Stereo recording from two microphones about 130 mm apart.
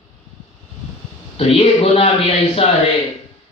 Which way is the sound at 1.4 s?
50° left (ahead or behind).